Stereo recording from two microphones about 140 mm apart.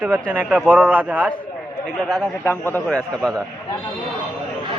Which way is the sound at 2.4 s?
15° left (ahead or behind).